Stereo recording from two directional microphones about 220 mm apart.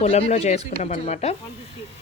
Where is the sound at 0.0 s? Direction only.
30° left (ahead or behind).